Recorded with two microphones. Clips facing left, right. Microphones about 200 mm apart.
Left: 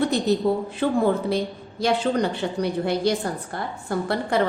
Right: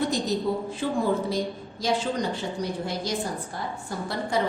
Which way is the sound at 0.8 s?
60° left (ahead or behind).